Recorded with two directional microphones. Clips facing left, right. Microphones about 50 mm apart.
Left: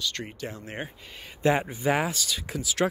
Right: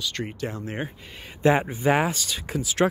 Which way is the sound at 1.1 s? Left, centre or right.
Right.